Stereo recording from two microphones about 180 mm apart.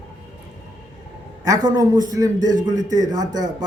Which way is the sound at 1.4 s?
20° right (ahead or behind).